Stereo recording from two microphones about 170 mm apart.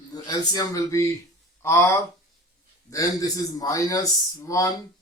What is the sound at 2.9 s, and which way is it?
Speech, 20° left (ahead or behind).